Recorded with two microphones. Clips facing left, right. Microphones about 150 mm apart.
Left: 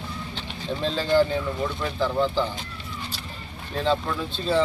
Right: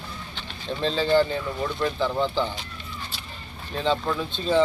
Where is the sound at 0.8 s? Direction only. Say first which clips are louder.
Even; 5° left (ahead or behind).